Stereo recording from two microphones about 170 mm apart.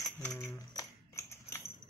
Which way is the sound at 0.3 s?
20° left (ahead or behind).